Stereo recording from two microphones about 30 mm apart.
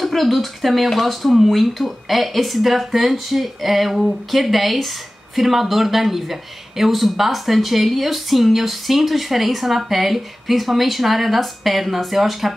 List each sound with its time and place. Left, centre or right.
0.0 s speech: centre